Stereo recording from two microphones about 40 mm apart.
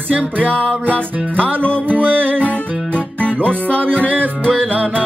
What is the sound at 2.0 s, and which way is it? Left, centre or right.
Music, right.